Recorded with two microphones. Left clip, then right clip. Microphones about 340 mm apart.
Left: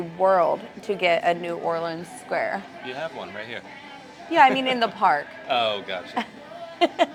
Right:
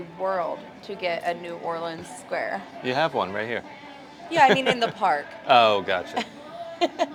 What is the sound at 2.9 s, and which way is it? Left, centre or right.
Speech, right.